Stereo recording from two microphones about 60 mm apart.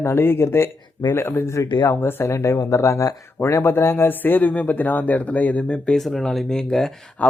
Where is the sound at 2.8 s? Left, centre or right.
Left.